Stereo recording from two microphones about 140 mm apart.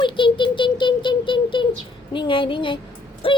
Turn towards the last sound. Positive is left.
turn(degrees=40)  # may be behind; listen again after turning